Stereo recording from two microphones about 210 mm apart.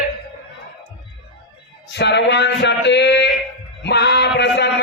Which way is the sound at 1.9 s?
55° left (ahead or behind).